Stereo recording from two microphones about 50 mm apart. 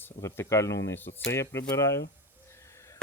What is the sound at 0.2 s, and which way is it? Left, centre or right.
Speech, left.